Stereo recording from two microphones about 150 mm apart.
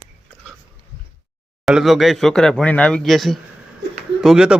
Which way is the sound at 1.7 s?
Centre (ahead or behind).